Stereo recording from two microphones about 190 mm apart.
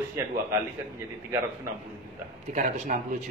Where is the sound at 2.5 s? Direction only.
40° right (ahead or behind).